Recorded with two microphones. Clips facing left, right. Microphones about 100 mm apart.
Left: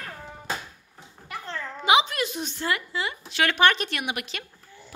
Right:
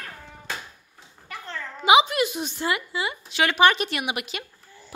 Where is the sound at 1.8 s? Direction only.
10° right (ahead or behind).